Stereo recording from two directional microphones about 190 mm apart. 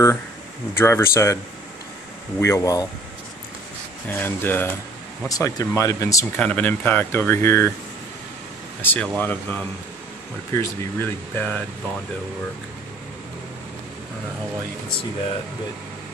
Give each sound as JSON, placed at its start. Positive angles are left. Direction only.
{"t": 0.7, "sound": "speech", "side_deg": 15}
{"t": 4.1, "sound": "speech", "side_deg": 10}
{"t": 8.8, "sound": "speech", "side_deg": 10}